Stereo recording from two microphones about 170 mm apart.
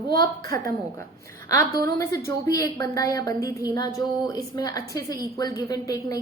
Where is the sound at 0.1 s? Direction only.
20° left (ahead or behind).